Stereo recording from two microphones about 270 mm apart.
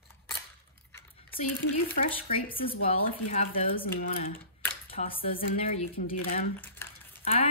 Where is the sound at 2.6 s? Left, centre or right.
Centre.